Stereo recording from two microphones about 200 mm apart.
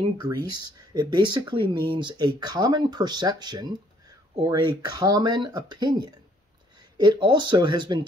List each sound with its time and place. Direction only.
0.2 s speech: 20° right (ahead or behind)